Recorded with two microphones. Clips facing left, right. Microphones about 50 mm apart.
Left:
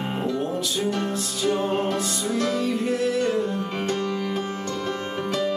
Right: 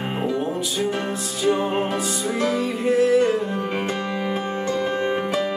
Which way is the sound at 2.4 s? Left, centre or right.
Centre.